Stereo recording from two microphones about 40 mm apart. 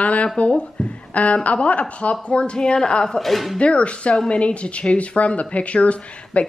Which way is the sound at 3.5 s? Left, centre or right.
Left.